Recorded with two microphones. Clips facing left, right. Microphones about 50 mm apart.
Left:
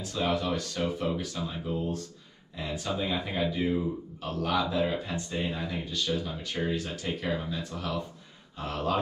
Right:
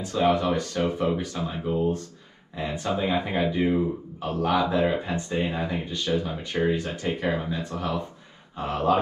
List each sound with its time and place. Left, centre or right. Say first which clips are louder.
0.0 s speech: right 7 dB; right